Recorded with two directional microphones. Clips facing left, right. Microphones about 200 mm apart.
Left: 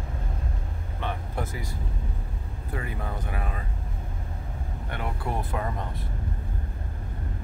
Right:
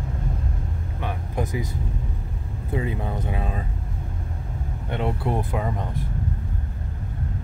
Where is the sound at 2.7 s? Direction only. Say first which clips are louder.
Right 7 dB; 20° right (ahead or behind).